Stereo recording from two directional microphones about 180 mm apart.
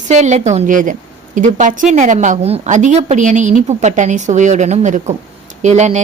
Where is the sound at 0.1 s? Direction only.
40° right (ahead or behind).